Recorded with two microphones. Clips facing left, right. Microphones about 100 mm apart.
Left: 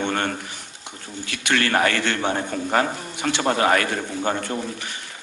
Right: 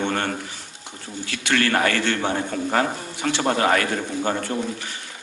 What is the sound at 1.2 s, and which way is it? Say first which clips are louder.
A man's voice: right 1 dB; 20° left (ahead or behind).